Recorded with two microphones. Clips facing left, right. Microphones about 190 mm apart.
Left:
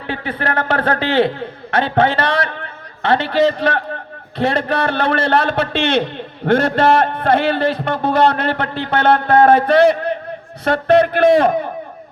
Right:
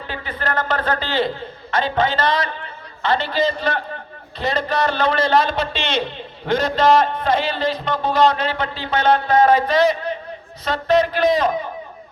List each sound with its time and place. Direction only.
0.1 s a man's voice: 70° left (ahead or behind)